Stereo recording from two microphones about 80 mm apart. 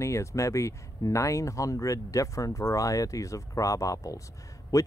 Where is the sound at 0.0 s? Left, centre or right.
Left.